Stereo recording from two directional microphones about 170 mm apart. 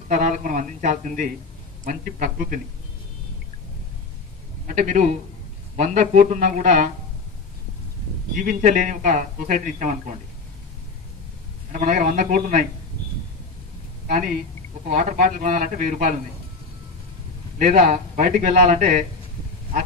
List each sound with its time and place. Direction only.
0.1 s a man's voice: 45° right (ahead or behind)
4.6 s a man's voice: 45° right (ahead or behind)
8.4 s a man's voice: 50° right (ahead or behind)
11.7 s a man's voice: 45° right (ahead or behind)
15.0 s a man's voice: 50° right (ahead or behind)
17.6 s a man's voice: 45° right (ahead or behind)